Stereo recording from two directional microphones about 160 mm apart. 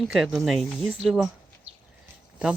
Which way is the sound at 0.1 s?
Centre (ahead or behind).